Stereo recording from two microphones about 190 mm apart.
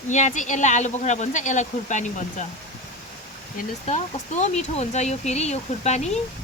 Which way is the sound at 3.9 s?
40° left (ahead or behind).